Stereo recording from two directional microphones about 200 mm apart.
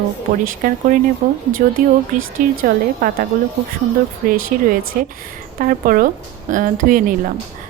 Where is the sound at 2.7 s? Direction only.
45° right (ahead or behind).